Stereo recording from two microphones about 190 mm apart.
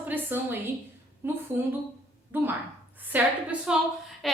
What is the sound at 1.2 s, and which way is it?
A woman's voice, 10° right (ahead or behind).